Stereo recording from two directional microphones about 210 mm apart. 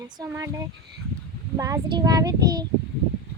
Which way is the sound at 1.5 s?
15° right (ahead or behind).